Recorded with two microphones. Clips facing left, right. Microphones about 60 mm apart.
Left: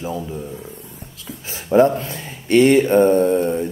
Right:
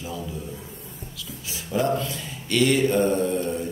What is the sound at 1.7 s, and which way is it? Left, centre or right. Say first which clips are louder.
Speech: left 9 dB; left.